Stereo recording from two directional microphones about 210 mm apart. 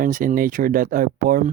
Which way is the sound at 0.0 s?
40° right (ahead or behind).